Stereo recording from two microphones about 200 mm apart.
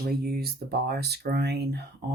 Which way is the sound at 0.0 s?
50° right (ahead or behind).